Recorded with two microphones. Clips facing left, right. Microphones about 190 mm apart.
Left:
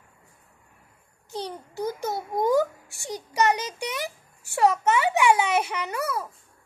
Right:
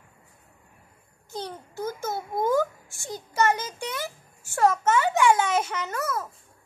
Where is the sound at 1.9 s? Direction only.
15° left (ahead or behind).